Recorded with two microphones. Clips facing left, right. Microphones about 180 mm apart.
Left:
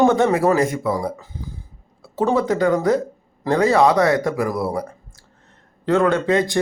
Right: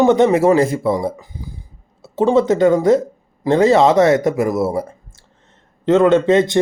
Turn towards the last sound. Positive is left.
turn(degrees=-25)  # may be behind; listen again after turning